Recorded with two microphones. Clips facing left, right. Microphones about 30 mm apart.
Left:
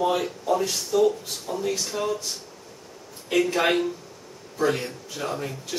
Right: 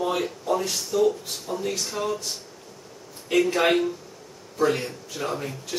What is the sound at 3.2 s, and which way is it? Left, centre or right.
Speech, centre.